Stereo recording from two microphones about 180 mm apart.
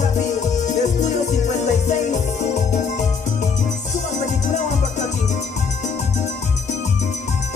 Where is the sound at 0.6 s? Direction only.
40° left (ahead or behind).